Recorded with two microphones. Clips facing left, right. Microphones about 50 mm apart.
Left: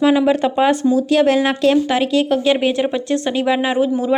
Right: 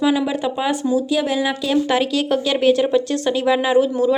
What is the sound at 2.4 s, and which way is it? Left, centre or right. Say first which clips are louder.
Speech: even; left.